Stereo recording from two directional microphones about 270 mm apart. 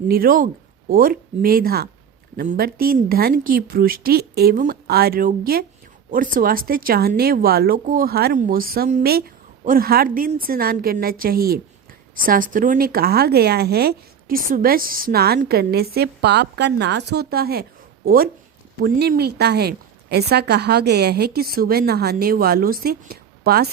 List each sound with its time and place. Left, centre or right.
0.1 s speech: right